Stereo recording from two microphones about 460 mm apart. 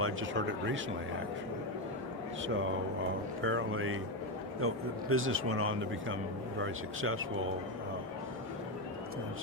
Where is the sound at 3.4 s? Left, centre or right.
Right.